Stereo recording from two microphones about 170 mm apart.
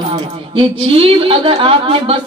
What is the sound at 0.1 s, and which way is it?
A man's voice, 30° right (ahead or behind).